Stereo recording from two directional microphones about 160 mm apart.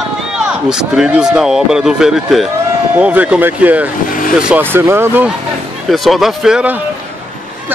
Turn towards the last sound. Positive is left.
turn(degrees=-10)  # may be behind; listen again after turning